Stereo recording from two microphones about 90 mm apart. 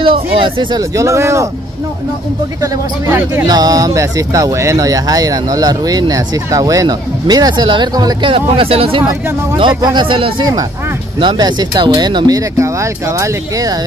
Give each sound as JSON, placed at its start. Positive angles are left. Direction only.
{"t": 0.0, "sound": "speech", "side_deg": -75}
{"t": 0.7, "sound": "speech", "side_deg": -35}
{"t": 3.1, "sound": "speech", "side_deg": -25}
{"t": 3.4, "sound": "speech", "side_deg": -45}
{"t": 8.3, "sound": "speech", "side_deg": -85}
{"t": 9.9, "sound": "speech", "side_deg": -70}
{"t": 11.1, "sound": "speech", "side_deg": -55}
{"t": 12.4, "sound": "speech", "side_deg": -35}